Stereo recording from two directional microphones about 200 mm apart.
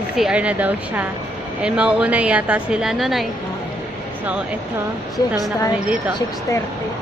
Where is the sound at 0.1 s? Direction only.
5° right (ahead or behind).